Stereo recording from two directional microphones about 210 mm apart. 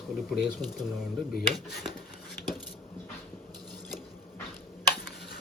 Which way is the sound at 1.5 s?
Centre (ahead or behind).